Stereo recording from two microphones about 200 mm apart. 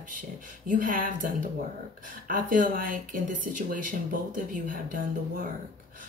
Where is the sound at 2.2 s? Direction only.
40° right (ahead or behind).